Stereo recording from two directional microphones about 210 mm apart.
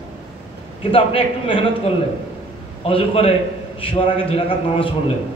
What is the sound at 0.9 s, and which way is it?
Speech, 25° left (ahead or behind).